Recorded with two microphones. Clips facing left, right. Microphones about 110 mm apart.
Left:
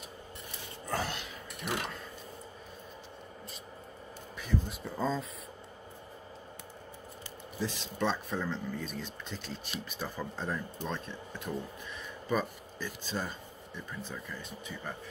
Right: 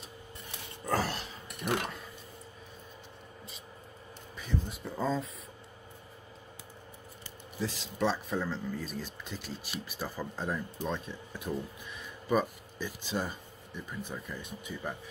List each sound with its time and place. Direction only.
0.8 s dog: 40° right (ahead or behind)
4.4 s a sound: centre (ahead or behind)
7.6 s speech: 5° right (ahead or behind)